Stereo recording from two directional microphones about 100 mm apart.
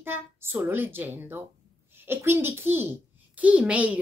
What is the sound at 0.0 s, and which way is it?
A child's voice, 20° right (ahead or behind).